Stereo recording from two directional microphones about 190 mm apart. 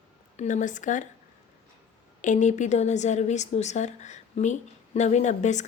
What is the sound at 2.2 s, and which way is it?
A woman's voice, 40° left (ahead or behind).